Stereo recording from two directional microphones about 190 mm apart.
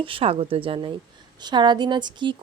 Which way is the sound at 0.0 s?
30° right (ahead or behind).